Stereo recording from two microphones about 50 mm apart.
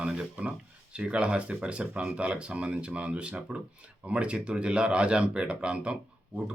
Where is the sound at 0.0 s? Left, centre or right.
Right.